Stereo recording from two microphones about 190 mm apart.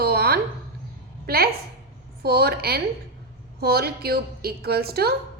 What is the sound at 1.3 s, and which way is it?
A woman's voice, 55° right (ahead or behind).